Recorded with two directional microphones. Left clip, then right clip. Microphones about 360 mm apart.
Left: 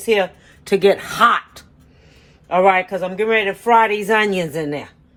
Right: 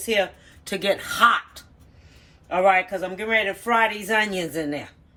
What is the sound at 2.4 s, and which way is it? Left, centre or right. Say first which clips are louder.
Speech: left 5 dB; centre.